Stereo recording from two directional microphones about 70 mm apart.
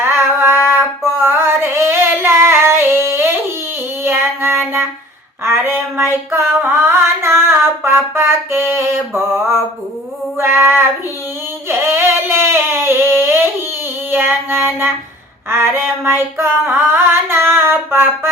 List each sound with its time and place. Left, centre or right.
0.0 s a sound: right
4.0 s child singing: right
5.4 s female singing: right
11.7 s a sound: right
14.1 s child singing: right
15.4 s female singing: right